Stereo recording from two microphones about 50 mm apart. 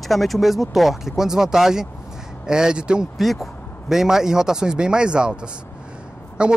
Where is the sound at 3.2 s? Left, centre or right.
Centre.